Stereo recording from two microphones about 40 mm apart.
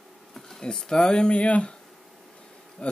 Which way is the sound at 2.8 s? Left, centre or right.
Left.